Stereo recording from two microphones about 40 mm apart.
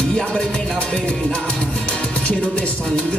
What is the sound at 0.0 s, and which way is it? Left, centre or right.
Music, left.